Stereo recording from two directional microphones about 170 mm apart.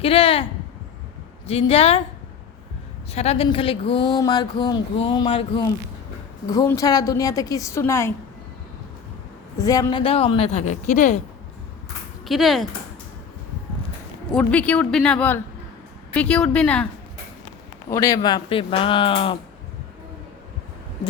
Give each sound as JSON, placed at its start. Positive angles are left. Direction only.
{"t": 0.0, "sound": "speech", "side_deg": 35}
{"t": 1.5, "sound": "speech", "side_deg": 35}
{"t": 3.1, "sound": "speech", "side_deg": 40}
{"t": 6.7, "sound": "speech", "side_deg": 20}
{"t": 9.6, "sound": "speech", "side_deg": 20}
{"t": 10.0, "sound": "speech", "side_deg": 35}
{"t": 12.2, "sound": "speech", "side_deg": 0}
{"t": 14.3, "sound": "speech", "side_deg": 10}
{"t": 17.8, "sound": "speech", "side_deg": 20}